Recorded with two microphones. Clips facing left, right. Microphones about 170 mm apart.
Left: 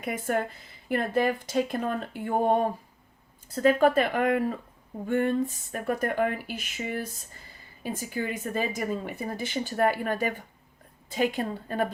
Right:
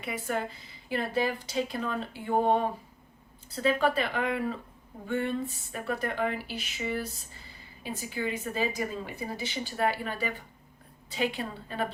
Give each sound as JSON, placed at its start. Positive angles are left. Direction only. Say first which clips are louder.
{"t": 0.0, "sound": "speech", "louder": "left 4 dB", "side_deg": 50}